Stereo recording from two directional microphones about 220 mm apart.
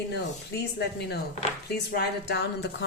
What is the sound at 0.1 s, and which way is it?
Speech, 50° left (ahead or behind).